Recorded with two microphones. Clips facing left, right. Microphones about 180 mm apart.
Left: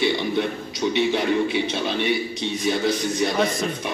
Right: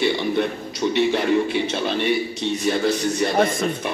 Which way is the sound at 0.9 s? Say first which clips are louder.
Right 2 dB; centre (ahead or behind).